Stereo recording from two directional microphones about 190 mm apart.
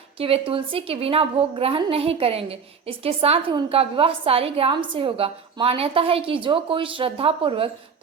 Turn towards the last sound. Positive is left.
turn(degrees=-30)  # may be behind; listen again after turning